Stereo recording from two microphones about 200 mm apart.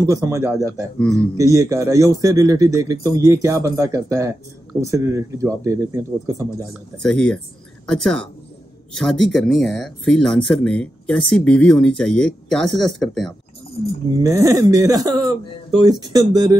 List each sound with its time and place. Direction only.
0.0 s speech: 15° right (ahead or behind)
7.0 s speech: 5° left (ahead or behind)
14.2 s speech: 15° right (ahead or behind)